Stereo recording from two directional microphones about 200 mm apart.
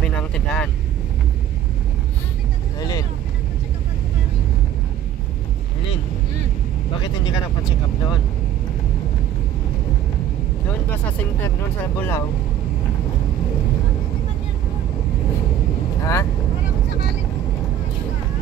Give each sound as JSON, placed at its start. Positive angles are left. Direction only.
{"t": 0.0, "sound": "vehicle", "side_deg": 5}
{"t": 2.8, "sound": "vehicle", "side_deg": 20}
{"t": 7.0, "sound": "vehicle", "side_deg": 20}
{"t": 10.7, "sound": "vehicle", "side_deg": 10}
{"t": 16.0, "sound": "vehicle", "side_deg": 15}